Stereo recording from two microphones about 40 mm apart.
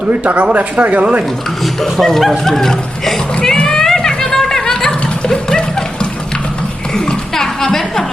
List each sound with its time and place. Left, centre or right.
0.1 s speech: right
1.6 s speech: centre
2.4 s a sound: centre